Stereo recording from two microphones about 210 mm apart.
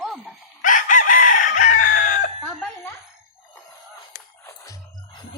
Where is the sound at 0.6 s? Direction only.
40° left (ahead or behind).